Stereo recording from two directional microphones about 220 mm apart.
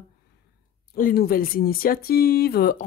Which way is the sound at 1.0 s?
40° left (ahead or behind).